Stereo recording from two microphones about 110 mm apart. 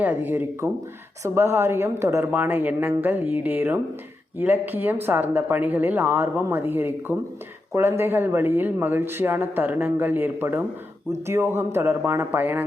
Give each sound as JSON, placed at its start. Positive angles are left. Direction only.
{"t": 0.0, "sound": "speech", "side_deg": -15}